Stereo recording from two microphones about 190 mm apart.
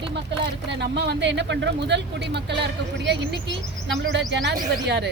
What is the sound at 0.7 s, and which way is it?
Speech, 65° right (ahead or behind).